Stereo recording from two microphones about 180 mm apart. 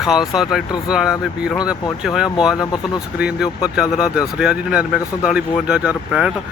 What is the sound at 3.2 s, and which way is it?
Speech, 5° right (ahead or behind).